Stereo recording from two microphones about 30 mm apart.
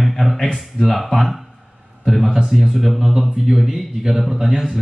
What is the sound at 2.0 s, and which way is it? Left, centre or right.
Speech, centre.